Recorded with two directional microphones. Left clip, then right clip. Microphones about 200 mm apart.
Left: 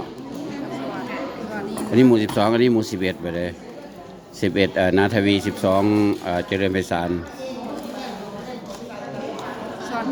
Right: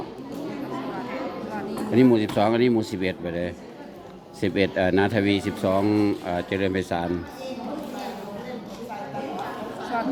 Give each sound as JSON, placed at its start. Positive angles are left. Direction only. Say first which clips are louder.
{"t": 1.5, "sound": "speech", "louder": "left 3 dB", "side_deg": 5}